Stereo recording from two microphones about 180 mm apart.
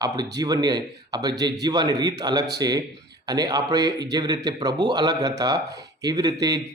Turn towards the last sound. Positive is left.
turn(degrees=-20)  # may be behind; listen again after turning